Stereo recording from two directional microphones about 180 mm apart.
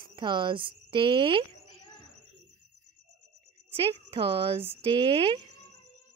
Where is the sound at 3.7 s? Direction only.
30° right (ahead or behind).